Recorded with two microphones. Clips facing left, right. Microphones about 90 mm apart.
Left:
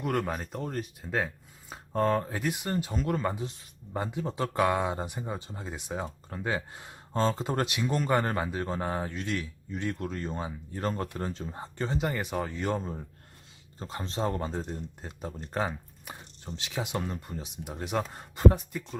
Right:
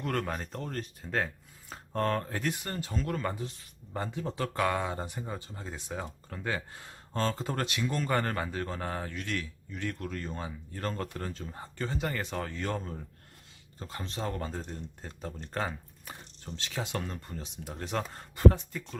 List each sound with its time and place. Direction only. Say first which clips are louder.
0.0 s speech: left 3 dB; 15° left (ahead or behind)